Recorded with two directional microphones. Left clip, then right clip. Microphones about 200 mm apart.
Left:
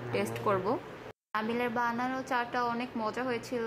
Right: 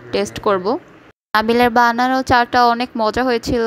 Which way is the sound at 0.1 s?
35° right (ahead or behind).